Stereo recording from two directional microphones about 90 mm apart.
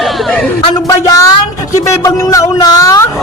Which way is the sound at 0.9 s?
40° left (ahead or behind).